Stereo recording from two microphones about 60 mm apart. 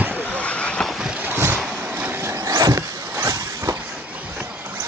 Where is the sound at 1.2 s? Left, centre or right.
Right.